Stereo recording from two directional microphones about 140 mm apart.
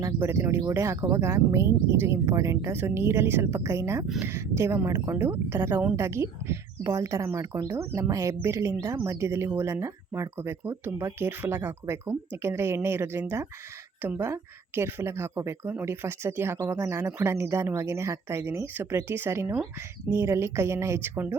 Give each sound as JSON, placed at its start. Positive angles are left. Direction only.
{"t": 0.0, "sound": "speech", "side_deg": -20}